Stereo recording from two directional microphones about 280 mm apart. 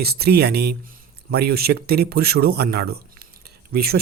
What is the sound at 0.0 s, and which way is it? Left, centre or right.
Speech, right.